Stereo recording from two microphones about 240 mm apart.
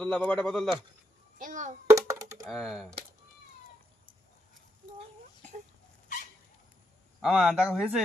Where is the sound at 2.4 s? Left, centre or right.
Centre.